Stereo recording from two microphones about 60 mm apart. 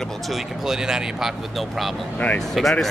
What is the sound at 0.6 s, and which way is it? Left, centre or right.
Speech, centre.